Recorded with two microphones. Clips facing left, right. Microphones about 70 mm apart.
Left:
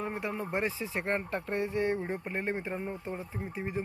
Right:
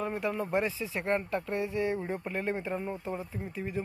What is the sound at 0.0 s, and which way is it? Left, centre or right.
Speech, left.